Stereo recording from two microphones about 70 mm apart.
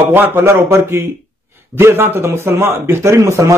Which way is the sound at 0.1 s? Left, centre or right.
Right.